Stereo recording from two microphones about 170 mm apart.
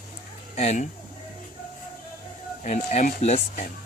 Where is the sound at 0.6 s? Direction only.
45° left (ahead or behind).